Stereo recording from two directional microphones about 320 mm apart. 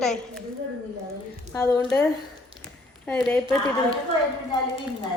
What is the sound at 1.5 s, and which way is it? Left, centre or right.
Speech, centre.